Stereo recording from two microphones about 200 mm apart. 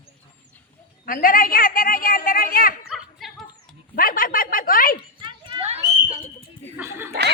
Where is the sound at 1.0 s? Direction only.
45° left (ahead or behind).